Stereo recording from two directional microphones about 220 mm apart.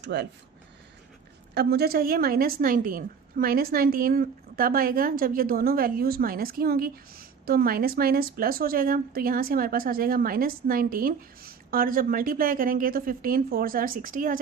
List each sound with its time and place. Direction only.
0.0 s speech: 50° right (ahead or behind)
1.5 s a woman's voice: 45° right (ahead or behind)